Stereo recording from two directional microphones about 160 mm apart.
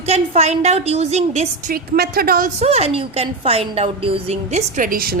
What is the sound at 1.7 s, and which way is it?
Speech, 70° right (ahead or behind).